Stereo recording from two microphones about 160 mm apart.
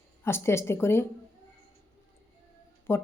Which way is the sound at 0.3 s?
15° left (ahead or behind).